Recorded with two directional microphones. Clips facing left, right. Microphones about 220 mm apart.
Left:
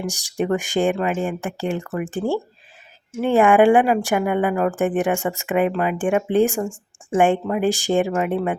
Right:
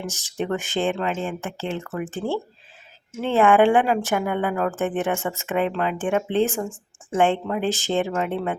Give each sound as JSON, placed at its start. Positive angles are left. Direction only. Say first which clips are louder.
{"t": 0.0, "sound": "speech", "louder": "left 4 dB", "side_deg": 15}